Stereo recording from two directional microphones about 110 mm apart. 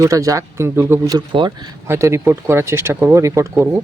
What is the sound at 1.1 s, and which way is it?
Speech, 45° right (ahead or behind).